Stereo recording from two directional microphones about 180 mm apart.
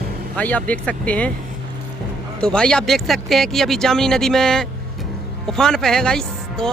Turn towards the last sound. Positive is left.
turn(degrees=5)  # may be behind; listen again after turning